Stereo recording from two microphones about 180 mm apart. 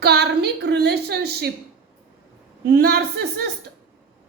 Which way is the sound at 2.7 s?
60° right (ahead or behind).